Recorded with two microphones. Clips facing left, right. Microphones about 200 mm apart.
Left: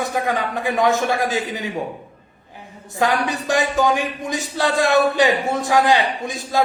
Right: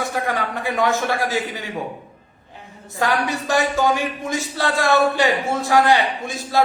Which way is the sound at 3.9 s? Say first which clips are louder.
Even; 15° left (ahead or behind).